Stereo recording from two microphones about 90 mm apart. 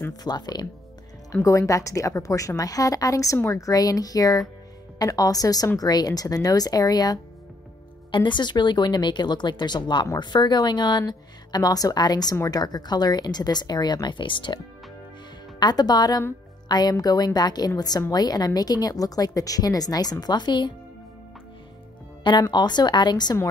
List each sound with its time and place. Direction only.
0.1 s a woman's voice: 50° left (ahead or behind)
1.3 s a woman's voice: 35° left (ahead or behind)
8.1 s a woman's voice: 60° left (ahead or behind)
15.6 s a woman's voice: 50° left (ahead or behind)
22.2 s speech: 60° left (ahead or behind)